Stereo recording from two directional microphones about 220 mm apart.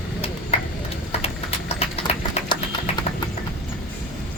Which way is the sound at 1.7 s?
25° left (ahead or behind).